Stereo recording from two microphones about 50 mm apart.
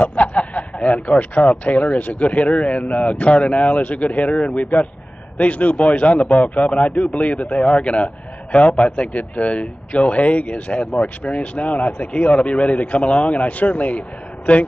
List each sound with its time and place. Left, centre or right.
0.0 s a man's voice: left